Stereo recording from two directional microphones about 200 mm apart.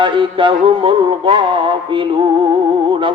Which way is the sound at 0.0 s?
25° right (ahead or behind).